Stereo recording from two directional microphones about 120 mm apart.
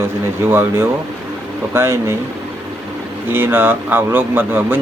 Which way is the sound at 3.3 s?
15° right (ahead or behind).